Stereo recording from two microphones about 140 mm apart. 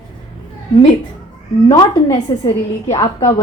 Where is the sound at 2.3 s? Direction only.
30° left (ahead or behind).